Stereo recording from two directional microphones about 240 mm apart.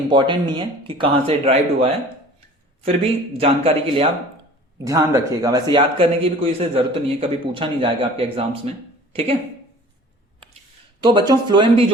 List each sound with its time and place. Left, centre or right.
0.1 s speech: centre
3.3 s speech: right
4.8 s speech: centre
11.0 s speech: centre